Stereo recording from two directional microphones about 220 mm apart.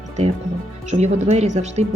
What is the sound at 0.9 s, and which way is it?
Speech, 30° right (ahead or behind).